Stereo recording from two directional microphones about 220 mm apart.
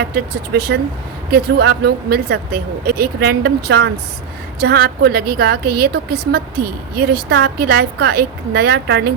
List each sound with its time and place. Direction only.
0.1 s speech: 45° right (ahead or behind)